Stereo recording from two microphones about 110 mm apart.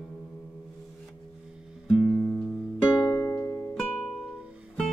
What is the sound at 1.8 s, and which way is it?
Music, centre (ahead or behind).